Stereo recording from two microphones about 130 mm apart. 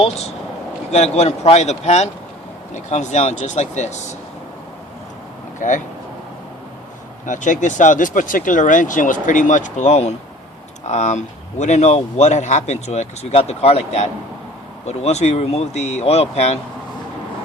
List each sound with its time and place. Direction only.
0.0 s a man's voice: 55° left (ahead or behind)
5.5 s speech: 75° left (ahead or behind)
7.3 s a man's voice: 75° left (ahead or behind); by 16.6 s 55° left (ahead or behind)